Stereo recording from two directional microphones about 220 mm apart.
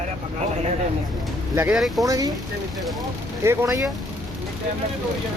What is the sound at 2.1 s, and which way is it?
Speech, 15° right (ahead or behind).